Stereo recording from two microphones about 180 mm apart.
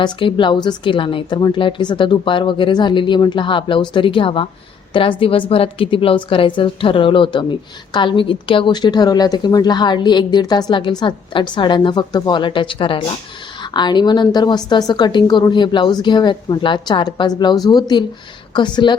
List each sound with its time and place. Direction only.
0.0 s a woman's voice: 25° left (ahead or behind)